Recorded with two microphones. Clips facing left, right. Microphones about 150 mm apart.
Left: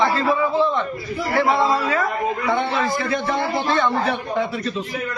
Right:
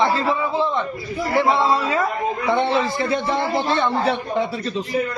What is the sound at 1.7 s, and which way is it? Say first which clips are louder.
A man's voice: even; 25° right (ahead or behind).